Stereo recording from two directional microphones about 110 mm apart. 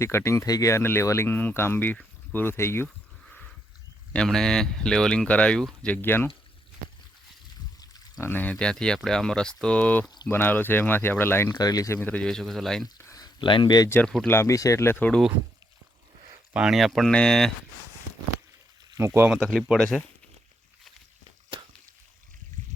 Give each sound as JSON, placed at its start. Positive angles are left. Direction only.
{"t": 0.0, "sound": "speech", "side_deg": 25}
{"t": 3.2, "sound": "a sound", "side_deg": 10}
{"t": 4.1, "sound": "speech", "side_deg": 5}
{"t": 7.8, "sound": "pour", "side_deg": 35}
{"t": 8.2, "sound": "speech", "side_deg": 15}
{"t": 11.5, "sound": "speech", "side_deg": 35}
{"t": 11.9, "sound": "speech", "side_deg": 15}
{"t": 13.1, "sound": "speech", "side_deg": 40}
{"t": 14.3, "sound": "speech", "side_deg": 25}
{"t": 16.6, "sound": "speech", "side_deg": -5}
{"t": 18.9, "sound": "speech", "side_deg": -25}
{"t": 19.4, "sound": "speech", "side_deg": 0}